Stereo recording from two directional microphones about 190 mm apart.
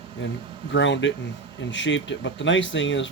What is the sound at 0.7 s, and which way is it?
Speech, 75° left (ahead or behind).